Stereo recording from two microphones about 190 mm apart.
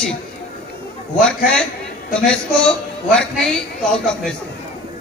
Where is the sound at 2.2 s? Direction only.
5° left (ahead or behind).